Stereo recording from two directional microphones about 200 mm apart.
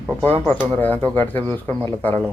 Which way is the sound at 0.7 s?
10° left (ahead or behind).